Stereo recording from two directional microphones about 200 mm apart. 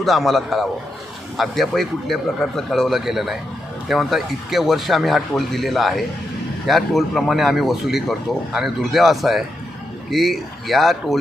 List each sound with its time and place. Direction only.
0.0 s a man's voice: centre (ahead or behind)